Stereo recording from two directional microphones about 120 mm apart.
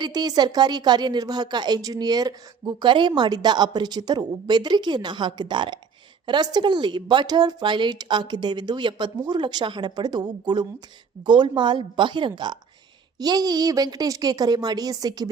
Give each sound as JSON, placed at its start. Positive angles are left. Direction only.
{"t": 0.0, "sound": "speech", "side_deg": -35}